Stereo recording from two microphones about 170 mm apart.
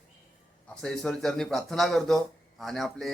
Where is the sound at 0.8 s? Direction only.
5° left (ahead or behind).